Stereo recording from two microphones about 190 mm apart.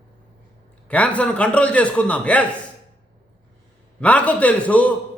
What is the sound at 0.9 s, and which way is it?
A man's voice, 5° left (ahead or behind).